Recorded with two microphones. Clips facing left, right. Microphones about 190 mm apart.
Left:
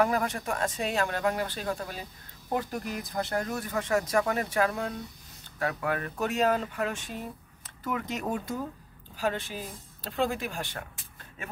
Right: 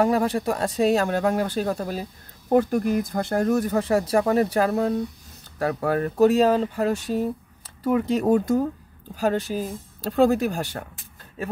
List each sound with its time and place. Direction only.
0.0 s speech: 30° right (ahead or behind)
2.5 s speech: 50° right (ahead or behind)